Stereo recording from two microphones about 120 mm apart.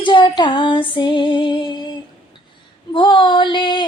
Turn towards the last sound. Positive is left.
turn(degrees=40)  # may be behind; listen again after turning